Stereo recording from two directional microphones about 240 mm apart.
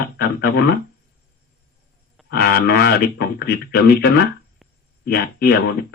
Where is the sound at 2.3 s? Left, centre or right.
Left.